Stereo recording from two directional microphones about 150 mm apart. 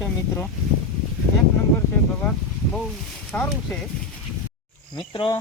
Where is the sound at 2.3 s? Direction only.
10° left (ahead or behind).